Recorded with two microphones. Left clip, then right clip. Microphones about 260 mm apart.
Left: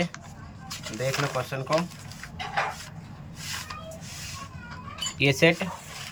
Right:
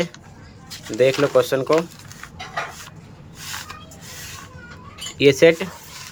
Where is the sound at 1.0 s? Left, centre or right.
Right.